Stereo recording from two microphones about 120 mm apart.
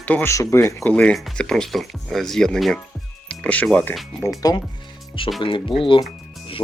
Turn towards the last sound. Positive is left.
turn(degrees=45)  # may be behind; listen again after turning